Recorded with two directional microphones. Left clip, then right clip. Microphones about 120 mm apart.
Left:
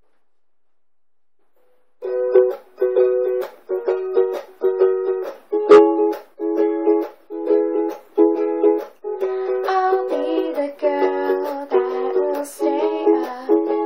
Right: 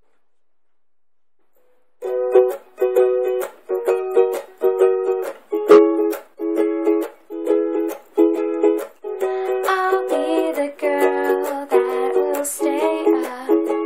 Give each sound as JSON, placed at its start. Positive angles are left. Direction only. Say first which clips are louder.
{"t": 2.0, "sound": "music", "louder": "even", "side_deg": -5}
{"t": 5.7, "sound": "music", "louder": "left 1 dB", "side_deg": -25}
{"t": 6.4, "sound": "music", "louder": "left 1 dB", "side_deg": 0}